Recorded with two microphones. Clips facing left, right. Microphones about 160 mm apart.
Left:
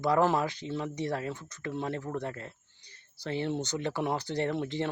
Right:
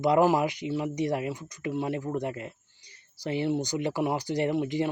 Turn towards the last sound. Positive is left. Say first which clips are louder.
# right 4 dB
turn(degrees=-10)  # may be behind; listen again after turning